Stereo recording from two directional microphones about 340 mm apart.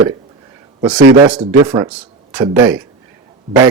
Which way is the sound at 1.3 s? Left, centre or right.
Centre.